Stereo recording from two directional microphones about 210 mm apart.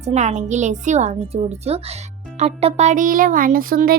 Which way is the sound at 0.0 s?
35° right (ahead or behind).